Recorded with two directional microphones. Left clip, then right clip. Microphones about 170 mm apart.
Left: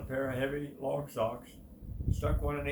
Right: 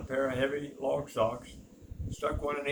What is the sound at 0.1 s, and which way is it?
Speech, 10° right (ahead or behind).